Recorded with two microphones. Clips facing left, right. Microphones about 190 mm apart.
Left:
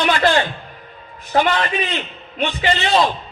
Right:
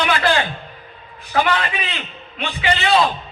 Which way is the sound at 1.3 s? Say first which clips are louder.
Left 2 dB; 35° left (ahead or behind).